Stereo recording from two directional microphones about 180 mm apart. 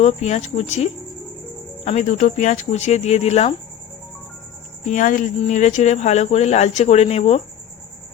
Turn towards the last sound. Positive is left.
turn(degrees=35)  # may be behind; listen again after turning